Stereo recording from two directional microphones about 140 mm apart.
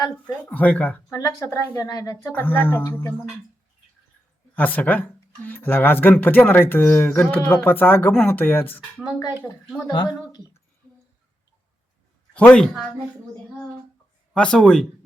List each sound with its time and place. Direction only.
0.4 s speech: 10° left (ahead or behind); by 2.1 s 25° left (ahead or behind)
2.2 s speech: 15° left (ahead or behind)
4.5 s speech: 10° left (ahead or behind)
9.8 s speech: 30° left (ahead or behind)
12.3 s speech: 10° left (ahead or behind)
14.3 s speech: 5° left (ahead or behind)